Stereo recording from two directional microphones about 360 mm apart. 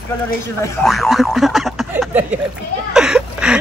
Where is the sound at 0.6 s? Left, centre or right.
Centre.